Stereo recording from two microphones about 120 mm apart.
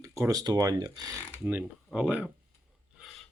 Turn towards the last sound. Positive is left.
turn(degrees=0)  # may be behind; listen again after turning